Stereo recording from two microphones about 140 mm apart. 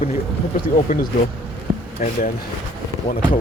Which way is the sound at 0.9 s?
75° left (ahead or behind).